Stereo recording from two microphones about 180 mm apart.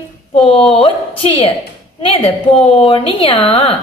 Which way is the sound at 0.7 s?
30° left (ahead or behind).